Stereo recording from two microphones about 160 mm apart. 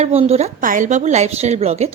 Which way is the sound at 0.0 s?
40° right (ahead or behind).